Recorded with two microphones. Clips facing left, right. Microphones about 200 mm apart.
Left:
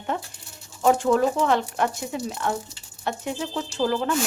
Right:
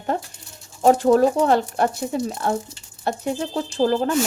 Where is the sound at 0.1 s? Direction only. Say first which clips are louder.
Right 4 dB; 40° right (ahead or behind).